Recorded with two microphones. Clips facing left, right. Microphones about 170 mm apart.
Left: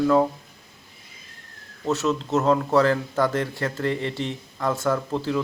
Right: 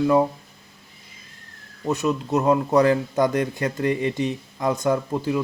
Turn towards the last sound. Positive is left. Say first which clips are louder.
# right 2 dB
turn(degrees=-10)  # may be behind; listen again after turning